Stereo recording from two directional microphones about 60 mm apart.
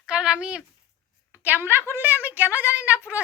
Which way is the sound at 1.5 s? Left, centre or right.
Right.